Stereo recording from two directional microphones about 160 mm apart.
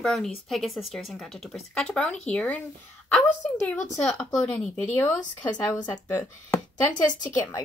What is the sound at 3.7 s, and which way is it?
Speech, 5° left (ahead or behind).